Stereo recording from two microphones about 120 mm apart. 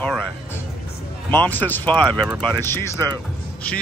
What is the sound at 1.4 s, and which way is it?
Speech, 15° left (ahead or behind).